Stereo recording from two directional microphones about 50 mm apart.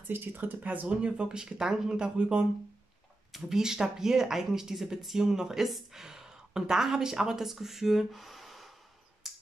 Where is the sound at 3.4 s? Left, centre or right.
Centre.